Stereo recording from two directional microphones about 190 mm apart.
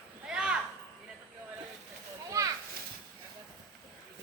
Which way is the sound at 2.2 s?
15° right (ahead or behind).